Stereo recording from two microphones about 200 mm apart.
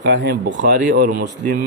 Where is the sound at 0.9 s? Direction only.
45° right (ahead or behind).